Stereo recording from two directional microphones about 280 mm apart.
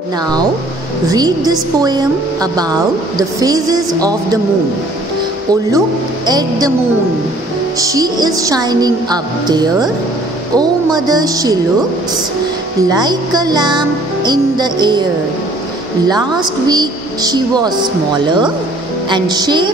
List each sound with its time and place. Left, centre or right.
1.0 s a woman's voice: centre
5.5 s a woman's voice: centre
7.8 s a woman's voice: centre
12.8 s a woman's voice: centre
16.6 s a woman's voice: centre